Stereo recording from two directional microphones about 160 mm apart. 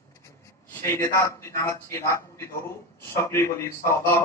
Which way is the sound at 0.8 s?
20° left (ahead or behind).